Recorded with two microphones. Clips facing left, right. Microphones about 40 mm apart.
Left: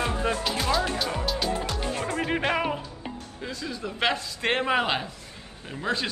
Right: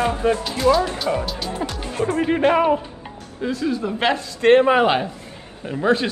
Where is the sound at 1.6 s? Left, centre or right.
Right.